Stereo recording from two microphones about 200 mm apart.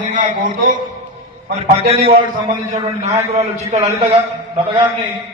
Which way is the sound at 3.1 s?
35° right (ahead or behind).